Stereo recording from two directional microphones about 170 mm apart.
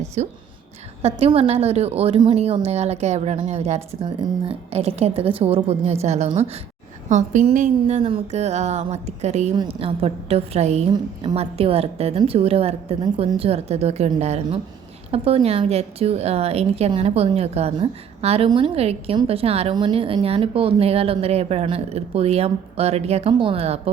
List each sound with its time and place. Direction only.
0.0 s whispering: 40° right (ahead or behind)
1.0 s a woman's voice: 40° right (ahead or behind)
10.9 s a woman's voice: 25° right (ahead or behind)
11.3 s a woman's voice: 35° right (ahead or behind)